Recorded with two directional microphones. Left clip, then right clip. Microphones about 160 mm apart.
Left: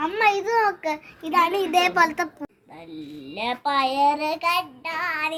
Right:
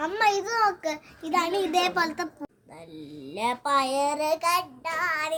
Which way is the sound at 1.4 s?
20° left (ahead or behind).